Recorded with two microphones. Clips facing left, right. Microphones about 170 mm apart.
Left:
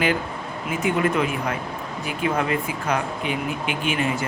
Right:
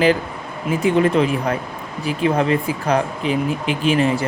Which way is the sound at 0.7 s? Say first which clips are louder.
Right 6 dB; 35° right (ahead or behind).